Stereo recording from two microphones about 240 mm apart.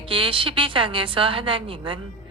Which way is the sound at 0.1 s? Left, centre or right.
Right.